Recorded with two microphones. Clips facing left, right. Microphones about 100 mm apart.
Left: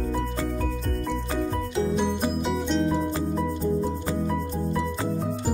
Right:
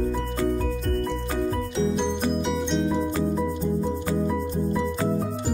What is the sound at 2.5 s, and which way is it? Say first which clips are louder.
Music: even; centre (ahead or behind).